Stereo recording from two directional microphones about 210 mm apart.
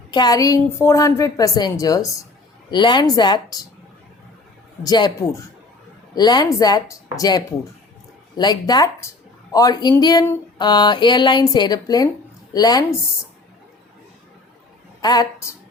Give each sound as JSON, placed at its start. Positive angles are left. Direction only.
{"t": 0.1, "sound": "a woman's voice", "side_deg": 20}
{"t": 4.8, "sound": "a woman's voice", "side_deg": 20}
{"t": 15.0, "sound": "a woman's voice", "side_deg": 20}